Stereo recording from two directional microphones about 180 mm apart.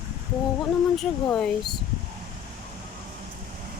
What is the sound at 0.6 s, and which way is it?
Speech, centre (ahead or behind).